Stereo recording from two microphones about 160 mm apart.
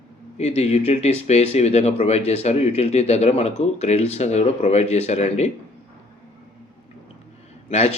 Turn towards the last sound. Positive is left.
turn(degrees=40)  # may be behind; listen again after turning